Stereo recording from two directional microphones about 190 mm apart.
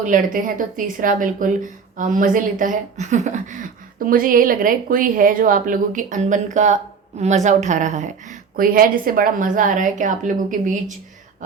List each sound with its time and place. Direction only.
0.0 s a woman's voice: 45° right (ahead or behind)